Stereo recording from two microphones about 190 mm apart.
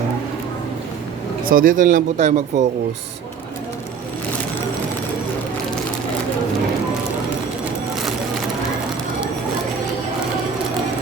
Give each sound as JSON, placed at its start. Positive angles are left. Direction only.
{"t": 1.5, "sound": "speech", "side_deg": -45}